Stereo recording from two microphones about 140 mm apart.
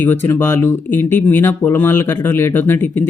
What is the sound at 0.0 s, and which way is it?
Speech, 15° left (ahead or behind).